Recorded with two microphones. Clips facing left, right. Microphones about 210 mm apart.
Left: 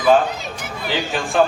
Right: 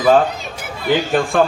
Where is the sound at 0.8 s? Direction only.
55° right (ahead or behind).